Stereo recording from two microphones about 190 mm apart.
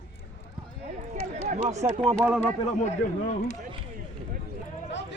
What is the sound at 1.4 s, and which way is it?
Speech, 40° right (ahead or behind).